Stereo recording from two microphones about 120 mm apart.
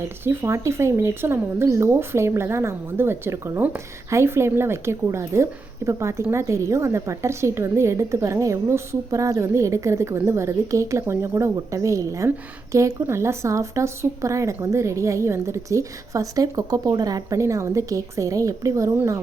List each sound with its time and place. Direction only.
0.3 s speech: 20° right (ahead or behind)